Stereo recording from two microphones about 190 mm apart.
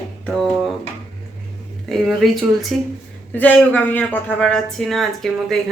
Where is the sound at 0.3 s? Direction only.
Centre (ahead or behind).